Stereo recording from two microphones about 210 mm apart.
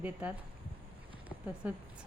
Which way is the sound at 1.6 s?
5° right (ahead or behind).